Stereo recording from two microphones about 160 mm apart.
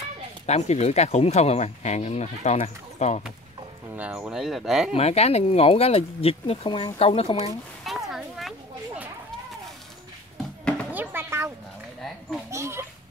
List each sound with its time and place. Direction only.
0.5 s speech: 45° left (ahead or behind)
3.9 s speech: 10° right (ahead or behind)
4.9 s speech: 40° left (ahead or behind)
7.8 s a sound: centre (ahead or behind)
10.9 s music: 10° right (ahead or behind)
12.4 s speech: 15° right (ahead or behind)